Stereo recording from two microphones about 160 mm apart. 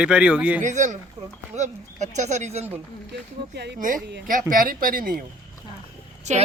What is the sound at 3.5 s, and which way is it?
Speech, 90° right.